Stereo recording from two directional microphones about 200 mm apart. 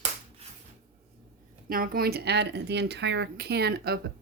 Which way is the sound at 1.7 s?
45° right (ahead or behind).